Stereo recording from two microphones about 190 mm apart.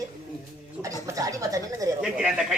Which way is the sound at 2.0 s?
5° right (ahead or behind).